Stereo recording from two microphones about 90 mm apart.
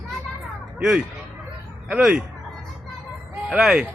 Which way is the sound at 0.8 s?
5° right (ahead or behind).